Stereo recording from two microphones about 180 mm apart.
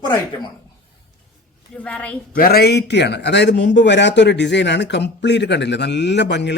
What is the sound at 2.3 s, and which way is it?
Speech, 55° left (ahead or behind).